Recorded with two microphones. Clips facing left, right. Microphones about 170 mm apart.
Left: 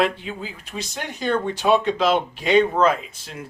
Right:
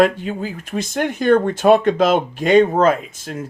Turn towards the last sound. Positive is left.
turn(degrees=-50)  # may be behind; listen again after turning